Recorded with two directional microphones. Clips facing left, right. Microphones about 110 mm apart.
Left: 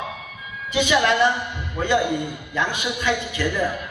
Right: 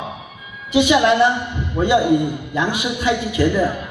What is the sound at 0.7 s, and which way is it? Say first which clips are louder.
A woman's voice: right 5 dB; 20° right (ahead or behind).